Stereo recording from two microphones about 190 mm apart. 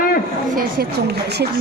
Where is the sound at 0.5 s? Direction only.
55° right (ahead or behind).